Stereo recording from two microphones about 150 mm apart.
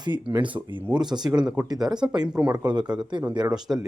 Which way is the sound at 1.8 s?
5° right (ahead or behind).